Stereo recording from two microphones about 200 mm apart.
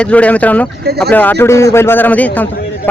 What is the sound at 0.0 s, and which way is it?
Speech, 5° left (ahead or behind).